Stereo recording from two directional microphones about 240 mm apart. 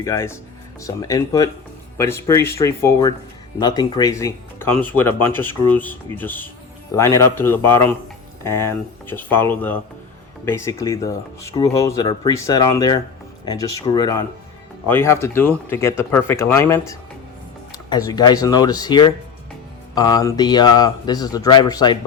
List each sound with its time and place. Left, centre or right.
0.0 s speech: centre